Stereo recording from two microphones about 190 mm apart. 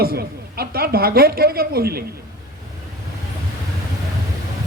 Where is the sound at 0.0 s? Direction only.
55° right (ahead or behind).